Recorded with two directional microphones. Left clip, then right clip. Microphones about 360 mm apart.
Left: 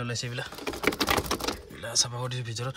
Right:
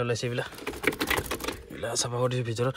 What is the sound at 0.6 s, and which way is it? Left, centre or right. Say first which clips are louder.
Typing: left 3 dB; left.